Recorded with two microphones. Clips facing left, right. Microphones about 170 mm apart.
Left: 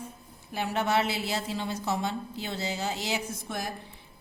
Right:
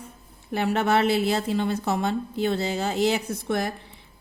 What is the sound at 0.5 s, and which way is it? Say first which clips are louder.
A woman's voice: right 5 dB; 60° right (ahead or behind).